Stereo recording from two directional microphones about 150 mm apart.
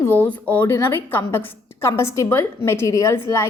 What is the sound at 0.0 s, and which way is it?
A woman's voice, 10° left (ahead or behind).